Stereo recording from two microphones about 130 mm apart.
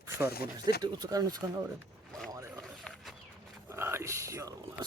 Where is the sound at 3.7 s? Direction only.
20° right (ahead or behind).